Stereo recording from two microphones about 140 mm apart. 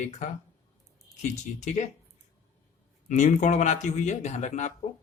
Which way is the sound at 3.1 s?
60° left (ahead or behind).